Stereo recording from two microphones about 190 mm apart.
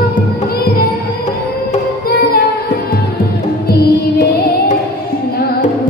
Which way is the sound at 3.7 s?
55° left (ahead or behind).